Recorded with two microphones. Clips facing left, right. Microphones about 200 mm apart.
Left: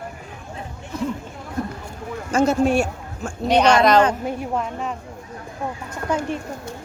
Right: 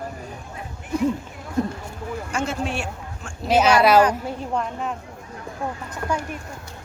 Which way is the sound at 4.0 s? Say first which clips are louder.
Left 1 dB; 25° left (ahead or behind).